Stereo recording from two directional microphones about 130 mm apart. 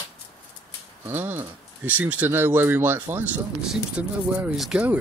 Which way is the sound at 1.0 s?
15° right (ahead or behind).